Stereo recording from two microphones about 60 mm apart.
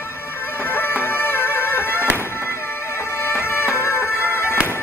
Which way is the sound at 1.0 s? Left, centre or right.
Left.